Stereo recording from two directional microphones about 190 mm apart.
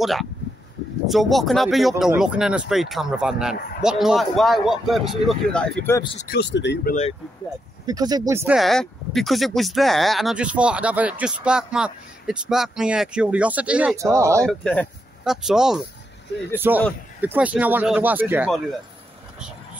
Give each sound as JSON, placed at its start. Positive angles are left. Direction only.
{"t": 0.0, "sound": "speech", "side_deg": 0}
{"t": 6.1, "sound": "speech", "side_deg": 55}
{"t": 6.9, "sound": "speech", "side_deg": 35}
{"t": 7.8, "sound": "speech", "side_deg": -20}
{"t": 8.5, "sound": "speech", "side_deg": 0}
{"t": 14.4, "sound": "speech", "side_deg": 5}